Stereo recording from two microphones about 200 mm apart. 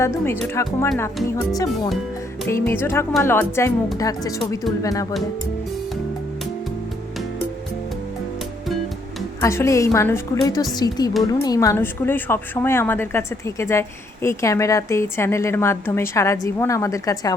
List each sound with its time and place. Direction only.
0.5 s a woman's voice: 15° left (ahead or behind)
9.4 s a woman's voice: 15° left (ahead or behind)